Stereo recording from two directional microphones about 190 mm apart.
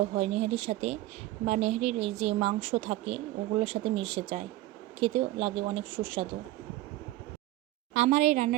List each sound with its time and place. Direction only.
0.1 s speech: 35° right (ahead or behind)
7.9 s speech: 40° right (ahead or behind)